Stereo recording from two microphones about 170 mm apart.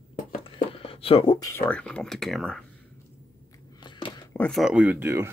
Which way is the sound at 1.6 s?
5° left (ahead or behind).